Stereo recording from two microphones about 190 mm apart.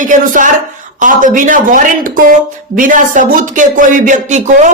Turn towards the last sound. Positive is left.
turn(degrees=-40)  # may be behind; listen again after turning